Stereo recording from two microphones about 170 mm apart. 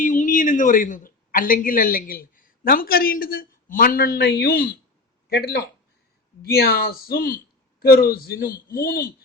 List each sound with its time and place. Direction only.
0.0 s a man's voice: 45° left (ahead or behind)